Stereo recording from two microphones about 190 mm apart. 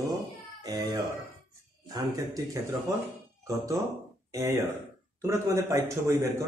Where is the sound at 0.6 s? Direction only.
20° right (ahead or behind).